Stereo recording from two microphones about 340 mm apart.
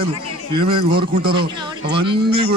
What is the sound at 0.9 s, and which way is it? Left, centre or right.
Speech, right.